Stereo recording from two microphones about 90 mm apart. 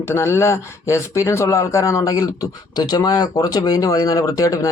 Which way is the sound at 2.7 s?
50° left (ahead or behind).